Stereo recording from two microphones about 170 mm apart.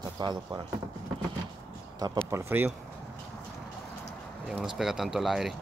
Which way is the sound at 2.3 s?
15° right (ahead or behind).